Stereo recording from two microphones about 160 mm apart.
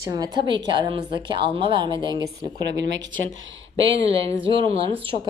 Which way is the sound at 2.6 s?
90° right.